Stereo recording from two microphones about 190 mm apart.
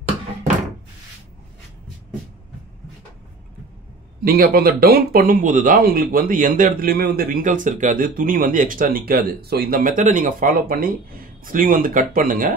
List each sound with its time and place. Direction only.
4.2 s speech: 50° right (ahead or behind)